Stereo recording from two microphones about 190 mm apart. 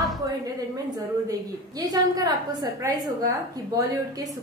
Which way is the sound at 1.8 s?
20° right (ahead or behind).